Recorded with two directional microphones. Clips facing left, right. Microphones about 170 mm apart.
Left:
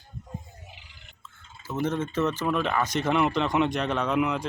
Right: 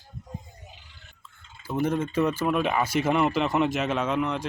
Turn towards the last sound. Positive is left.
turn(degrees=0)  # may be behind; listen again after turning